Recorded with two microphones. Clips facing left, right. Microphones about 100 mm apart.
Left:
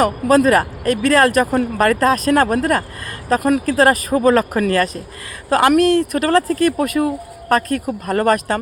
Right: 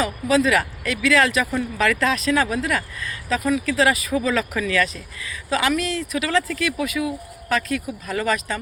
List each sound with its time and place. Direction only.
0.0 s speech: 50° left (ahead or behind)